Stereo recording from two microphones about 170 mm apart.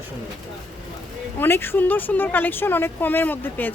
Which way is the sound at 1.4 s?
15° left (ahead or behind).